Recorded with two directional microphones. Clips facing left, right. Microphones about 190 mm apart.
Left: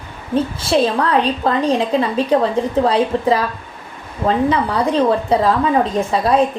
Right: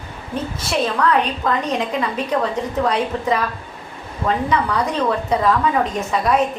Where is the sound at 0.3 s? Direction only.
30° left (ahead or behind).